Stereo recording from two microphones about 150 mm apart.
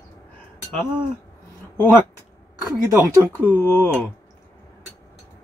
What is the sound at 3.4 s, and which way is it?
Speech, 15° left (ahead or behind).